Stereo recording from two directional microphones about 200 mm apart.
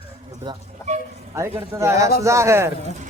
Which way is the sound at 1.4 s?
15° right (ahead or behind).